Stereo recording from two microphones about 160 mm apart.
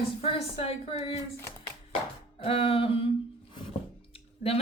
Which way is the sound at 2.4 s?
35° left (ahead or behind).